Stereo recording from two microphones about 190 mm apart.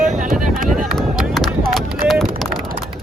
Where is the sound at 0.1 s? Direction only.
45° right (ahead or behind).